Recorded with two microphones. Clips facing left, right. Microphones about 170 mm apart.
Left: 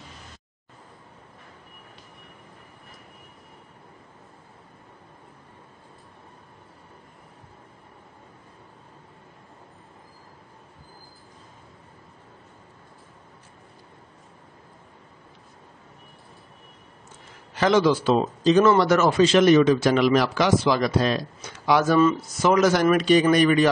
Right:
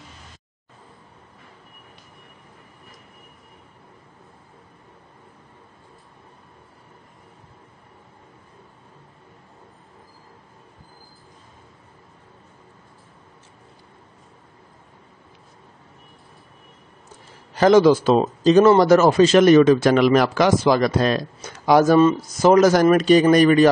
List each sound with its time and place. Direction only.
17.6 s a man's voice: 40° right (ahead or behind)